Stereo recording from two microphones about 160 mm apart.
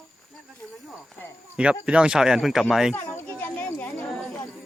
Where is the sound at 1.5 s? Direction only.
5° right (ahead or behind).